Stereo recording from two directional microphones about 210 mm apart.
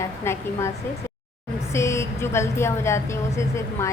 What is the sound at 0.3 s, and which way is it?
Speech, 10° left (ahead or behind).